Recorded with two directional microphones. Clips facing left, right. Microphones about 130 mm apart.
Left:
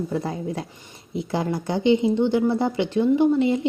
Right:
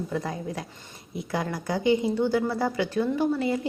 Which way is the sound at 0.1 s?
30° left (ahead or behind).